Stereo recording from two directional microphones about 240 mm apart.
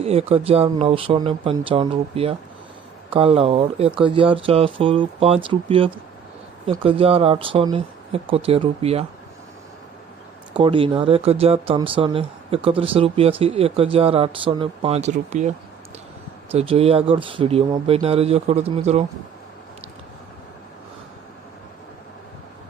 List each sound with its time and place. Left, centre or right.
0.0 s speech: right
10.5 s speech: right